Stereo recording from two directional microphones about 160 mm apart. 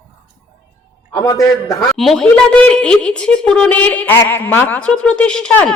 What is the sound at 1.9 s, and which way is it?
A woman's voice, centre (ahead or behind).